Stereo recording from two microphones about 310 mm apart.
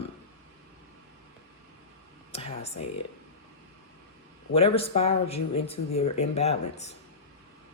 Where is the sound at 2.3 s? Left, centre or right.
Centre.